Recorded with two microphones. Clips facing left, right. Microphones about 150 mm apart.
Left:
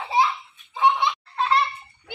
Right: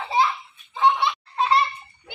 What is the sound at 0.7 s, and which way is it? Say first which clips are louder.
Laughter: even; 10° left (ahead or behind).